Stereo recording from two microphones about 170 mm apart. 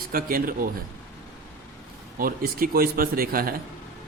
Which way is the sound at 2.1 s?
55° right (ahead or behind).